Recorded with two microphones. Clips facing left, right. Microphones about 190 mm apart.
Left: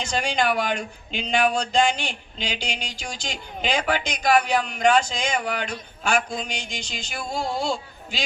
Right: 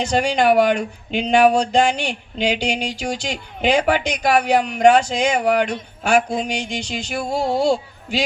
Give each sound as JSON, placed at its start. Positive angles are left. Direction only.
{"t": 0.0, "sound": "speech", "side_deg": -65}